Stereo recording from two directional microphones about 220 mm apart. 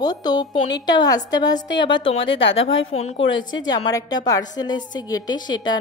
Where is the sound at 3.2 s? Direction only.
60° left (ahead or behind).